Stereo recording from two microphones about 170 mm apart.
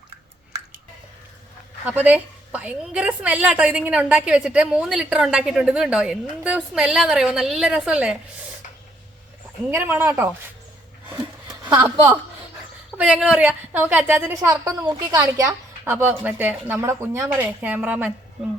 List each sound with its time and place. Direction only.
0.5 s drip: 20° right (ahead or behind)
1.8 s a woman's voice: 10° right (ahead or behind)
9.6 s a woman's voice: 10° right (ahead or behind)
11.1 s a sound: 10° right (ahead or behind)
13.0 s a woman's voice: 5° right (ahead or behind)